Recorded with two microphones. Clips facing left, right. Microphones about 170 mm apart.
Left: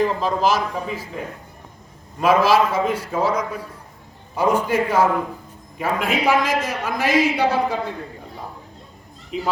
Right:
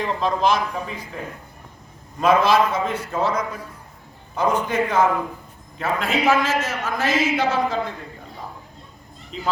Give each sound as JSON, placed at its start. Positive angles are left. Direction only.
{"t": 0.0, "sound": "a man's voice", "side_deg": 5}
{"t": 2.2, "sound": "a man's voice", "side_deg": 5}
{"t": 9.3, "sound": "a man's voice", "side_deg": 10}